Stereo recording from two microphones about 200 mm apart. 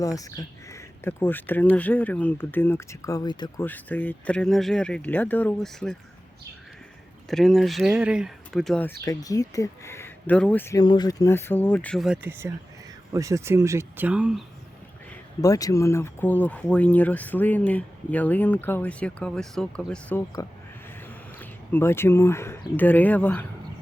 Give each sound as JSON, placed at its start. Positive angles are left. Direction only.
{"t": 0.0, "sound": "speech", "side_deg": 15}
{"t": 3.6, "sound": "speech", "side_deg": 10}
{"t": 7.3, "sound": "speech", "side_deg": 0}
{"t": 9.0, "sound": "speech", "side_deg": 15}
{"t": 15.1, "sound": "speech", "side_deg": 15}